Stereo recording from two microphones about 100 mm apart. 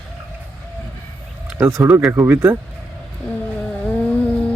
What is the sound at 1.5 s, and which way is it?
Speech, 25° right (ahead or behind).